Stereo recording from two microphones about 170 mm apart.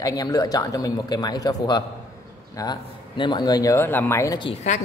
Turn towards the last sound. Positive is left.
turn(degrees=45)  # may be behind; listen again after turning